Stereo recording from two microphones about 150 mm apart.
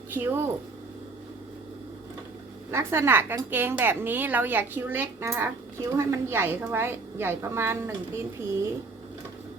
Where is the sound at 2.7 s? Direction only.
15° right (ahead or behind).